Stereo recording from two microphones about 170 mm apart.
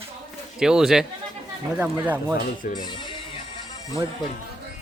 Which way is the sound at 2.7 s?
25° left (ahead or behind).